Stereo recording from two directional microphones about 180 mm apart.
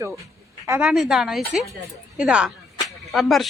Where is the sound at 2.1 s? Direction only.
5° right (ahead or behind).